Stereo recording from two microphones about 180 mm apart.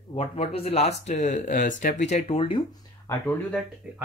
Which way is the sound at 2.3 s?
30° left (ahead or behind).